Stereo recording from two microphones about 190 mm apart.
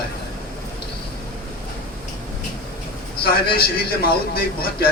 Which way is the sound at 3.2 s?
55° left (ahead or behind).